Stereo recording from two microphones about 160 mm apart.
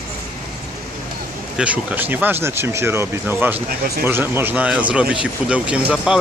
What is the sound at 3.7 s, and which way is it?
Speech, 70° right (ahead or behind).